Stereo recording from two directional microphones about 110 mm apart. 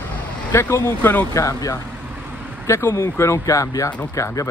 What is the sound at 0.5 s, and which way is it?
Speech, 25° left (ahead or behind).